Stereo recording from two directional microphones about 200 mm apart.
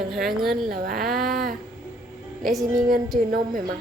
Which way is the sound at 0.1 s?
Centre (ahead or behind).